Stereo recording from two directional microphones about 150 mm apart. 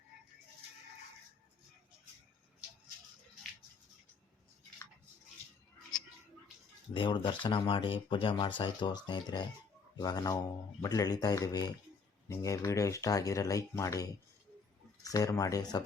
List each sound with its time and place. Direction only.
6.9 s speech: 35° left (ahead or behind)